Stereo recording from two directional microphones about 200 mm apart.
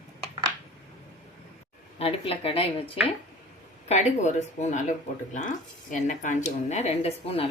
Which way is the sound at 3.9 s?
35° left (ahead or behind).